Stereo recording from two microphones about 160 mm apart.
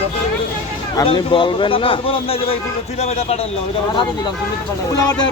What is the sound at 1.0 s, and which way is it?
A man's voice, 35° left (ahead or behind).